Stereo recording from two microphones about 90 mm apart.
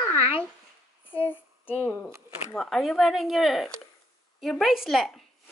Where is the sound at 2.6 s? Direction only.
Centre (ahead or behind).